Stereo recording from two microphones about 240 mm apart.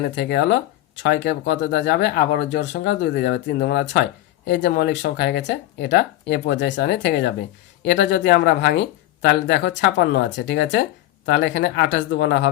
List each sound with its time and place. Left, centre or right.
0.2 s speech: left